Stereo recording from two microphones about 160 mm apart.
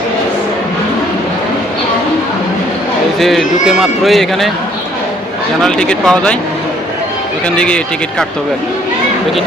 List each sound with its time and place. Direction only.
3.2 s speech: centre (ahead or behind)
5.6 s speech: 5° left (ahead or behind)
7.5 s speech: 5° left (ahead or behind)